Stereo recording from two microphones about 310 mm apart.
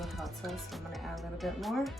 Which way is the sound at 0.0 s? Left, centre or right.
Centre.